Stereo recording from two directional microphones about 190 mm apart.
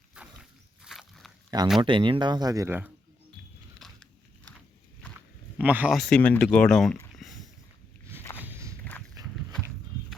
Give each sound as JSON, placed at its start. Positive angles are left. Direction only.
{"t": 0.2, "sound": "walk", "side_deg": -5}
{"t": 0.9, "sound": "a sound", "side_deg": 0}
{"t": 1.5, "sound": "speech", "side_deg": -20}
{"t": 3.8, "sound": "biting", "side_deg": 0}
{"t": 5.5, "sound": "speech", "side_deg": -10}
{"t": 6.0, "sound": "speech", "side_deg": 5}
{"t": 7.2, "sound": "a sound", "side_deg": 0}
{"t": 8.4, "sound": "walk", "side_deg": -10}